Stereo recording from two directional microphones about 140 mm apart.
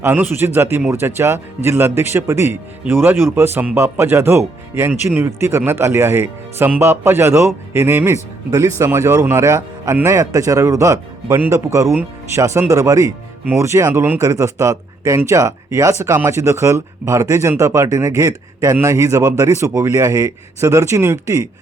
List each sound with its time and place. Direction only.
0.0 s a man's voice: 15° right (ahead or behind)